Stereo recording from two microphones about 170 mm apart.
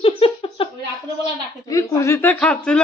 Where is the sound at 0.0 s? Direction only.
35° left (ahead or behind).